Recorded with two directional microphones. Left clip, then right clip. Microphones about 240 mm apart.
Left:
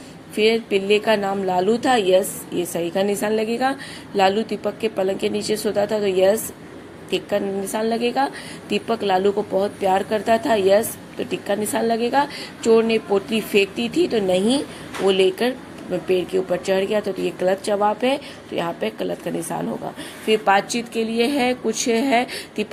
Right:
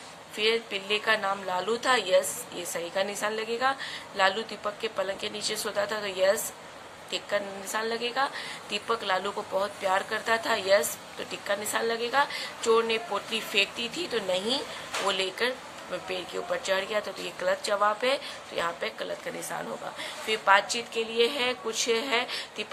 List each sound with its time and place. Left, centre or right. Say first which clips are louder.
0.3 s speech: left 9 dB; centre